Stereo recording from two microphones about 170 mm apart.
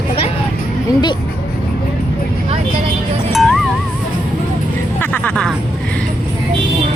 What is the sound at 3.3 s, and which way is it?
Music, centre (ahead or behind).